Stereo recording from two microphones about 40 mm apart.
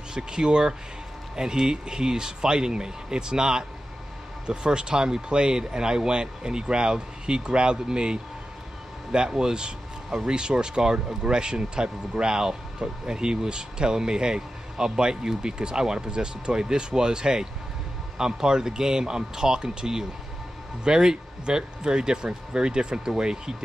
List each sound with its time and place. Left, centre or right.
0.1 s speech: centre